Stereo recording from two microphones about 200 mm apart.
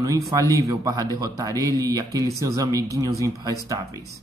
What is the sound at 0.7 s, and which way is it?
Speech, 20° right (ahead or behind).